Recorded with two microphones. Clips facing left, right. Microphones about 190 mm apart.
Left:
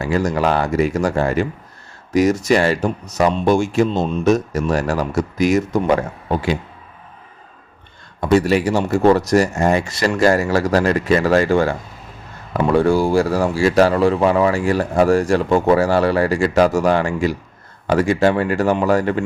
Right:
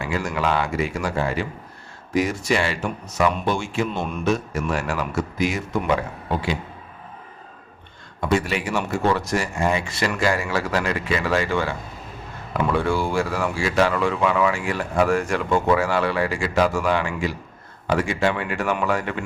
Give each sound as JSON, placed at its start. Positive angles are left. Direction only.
{"t": 0.0, "sound": "speech", "side_deg": 40}
{"t": 8.2, "sound": "speech", "side_deg": 40}